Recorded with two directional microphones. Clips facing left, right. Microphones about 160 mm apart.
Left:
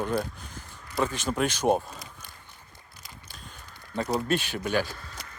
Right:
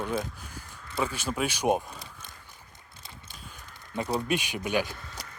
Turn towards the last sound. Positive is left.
turn(degrees=-15)  # may be behind; listen again after turning